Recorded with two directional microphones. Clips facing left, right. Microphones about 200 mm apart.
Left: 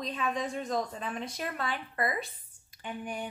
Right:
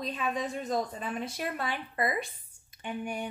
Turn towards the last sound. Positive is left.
turn(degrees=-10)  # may be behind; listen again after turning